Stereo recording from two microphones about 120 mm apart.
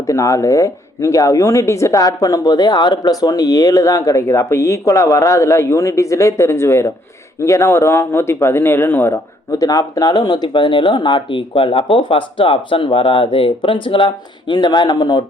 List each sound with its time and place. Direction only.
0.1 s speech: 25° left (ahead or behind)